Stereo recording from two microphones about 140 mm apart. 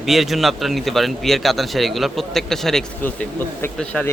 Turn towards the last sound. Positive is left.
turn(degrees=5)  # may be behind; listen again after turning